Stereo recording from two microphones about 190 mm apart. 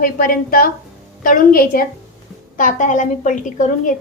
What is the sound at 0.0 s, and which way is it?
A woman's voice, 50° left (ahead or behind).